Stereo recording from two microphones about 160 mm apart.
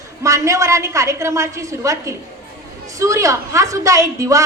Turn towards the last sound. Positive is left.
turn(degrees=-20)  # may be behind; listen again after turning